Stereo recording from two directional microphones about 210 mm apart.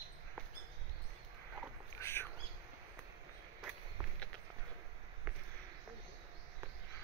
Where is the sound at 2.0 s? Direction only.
10° left (ahead or behind).